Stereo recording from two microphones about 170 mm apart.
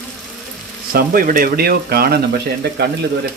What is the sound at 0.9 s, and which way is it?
Speech, 55° right (ahead or behind).